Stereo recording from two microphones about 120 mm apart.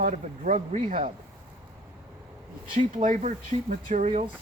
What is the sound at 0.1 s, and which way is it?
Speech, 75° right (ahead or behind).